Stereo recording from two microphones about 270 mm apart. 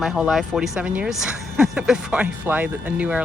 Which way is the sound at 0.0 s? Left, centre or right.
Centre.